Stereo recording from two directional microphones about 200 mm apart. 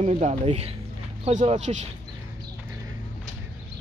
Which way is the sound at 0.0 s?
35° right (ahead or behind).